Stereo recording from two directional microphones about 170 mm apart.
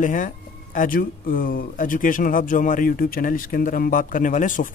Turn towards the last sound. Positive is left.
turn(degrees=50)  # may be behind; listen again after turning